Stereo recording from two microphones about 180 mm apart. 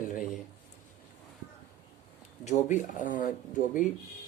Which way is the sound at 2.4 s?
40° left (ahead or behind).